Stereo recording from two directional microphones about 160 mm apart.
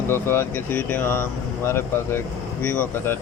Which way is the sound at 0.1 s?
15° left (ahead or behind).